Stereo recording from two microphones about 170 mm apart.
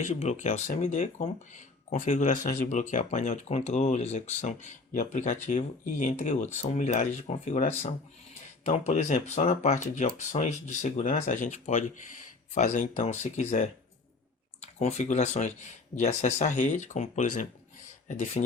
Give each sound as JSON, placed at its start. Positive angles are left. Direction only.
{"t": 0.0, "sound": "speech", "side_deg": 40}